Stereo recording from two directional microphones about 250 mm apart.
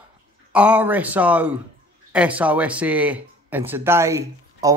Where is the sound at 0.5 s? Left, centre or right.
Centre.